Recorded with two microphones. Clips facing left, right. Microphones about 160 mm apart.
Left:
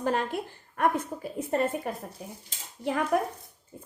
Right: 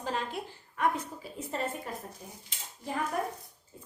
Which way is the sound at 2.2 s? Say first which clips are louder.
Left 4 dB; 70° left (ahead or behind).